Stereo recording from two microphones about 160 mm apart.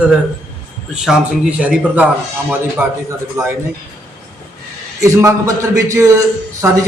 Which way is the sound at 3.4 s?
20° right (ahead or behind).